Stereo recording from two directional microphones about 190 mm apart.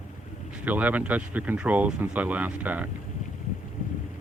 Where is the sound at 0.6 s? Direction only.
10° right (ahead or behind).